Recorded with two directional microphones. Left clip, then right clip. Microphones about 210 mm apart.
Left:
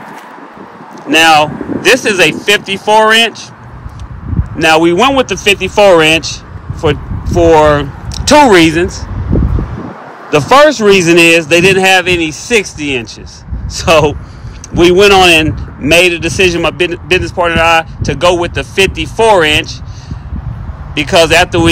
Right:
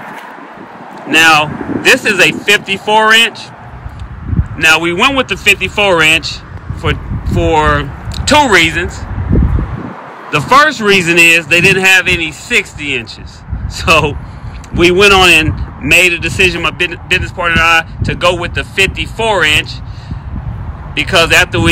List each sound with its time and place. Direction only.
1.1 s a man's voice: 15° left (ahead or behind)
4.6 s speech: 15° left (ahead or behind)
9.3 s a sound: 25° left (ahead or behind)
10.3 s a man's voice: 15° left (ahead or behind)